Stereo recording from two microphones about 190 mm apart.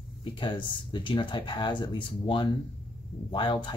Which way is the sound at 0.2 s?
25° left (ahead or behind).